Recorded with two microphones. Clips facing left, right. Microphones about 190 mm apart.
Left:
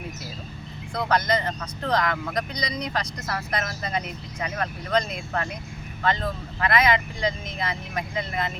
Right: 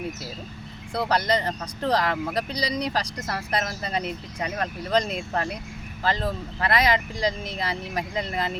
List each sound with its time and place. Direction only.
0.9 s speech: 35° right (ahead or behind)